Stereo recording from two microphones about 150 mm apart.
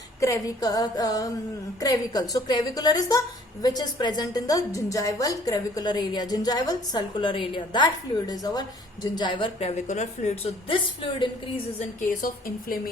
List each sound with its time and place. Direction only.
0.2 s a woman's voice: 20° left (ahead or behind)
12.0 s speech: 70° left (ahead or behind)